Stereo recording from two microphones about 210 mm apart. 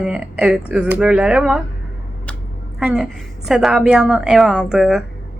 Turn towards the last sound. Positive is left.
turn(degrees=0)  # may be behind; listen again after turning